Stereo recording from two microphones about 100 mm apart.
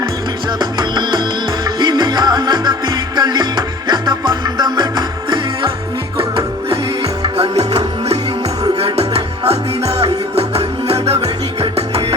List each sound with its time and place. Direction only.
0.6 s music: 50° right (ahead or behind)
6.1 s music: 60° right (ahead or behind)
7.3 s music: 90° right
8.8 s music: 90° right